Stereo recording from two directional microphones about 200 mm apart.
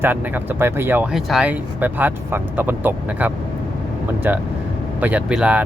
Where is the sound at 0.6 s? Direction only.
10° right (ahead or behind).